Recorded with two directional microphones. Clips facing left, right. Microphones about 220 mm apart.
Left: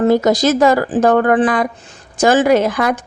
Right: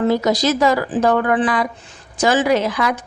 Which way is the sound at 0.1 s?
50° left (ahead or behind).